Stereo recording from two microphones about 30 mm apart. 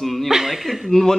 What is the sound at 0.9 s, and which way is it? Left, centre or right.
Speech, centre.